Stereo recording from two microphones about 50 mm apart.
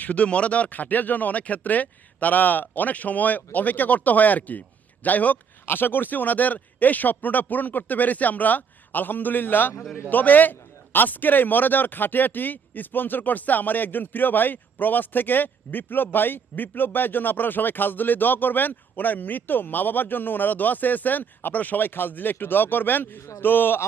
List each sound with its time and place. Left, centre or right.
0.0 s a man's voice: left
5.6 s a man's voice: left